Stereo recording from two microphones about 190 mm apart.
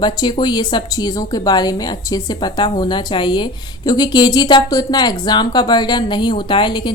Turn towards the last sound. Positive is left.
turn(degrees=25)  # may be behind; listen again after turning